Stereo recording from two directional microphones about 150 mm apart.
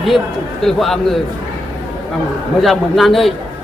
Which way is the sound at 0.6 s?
Centre (ahead or behind).